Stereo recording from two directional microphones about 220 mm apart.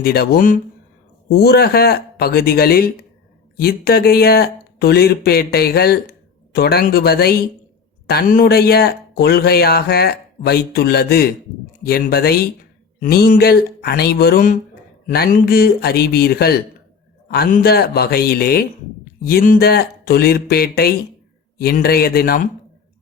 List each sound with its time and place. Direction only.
0.0 s speech: 45° left (ahead or behind)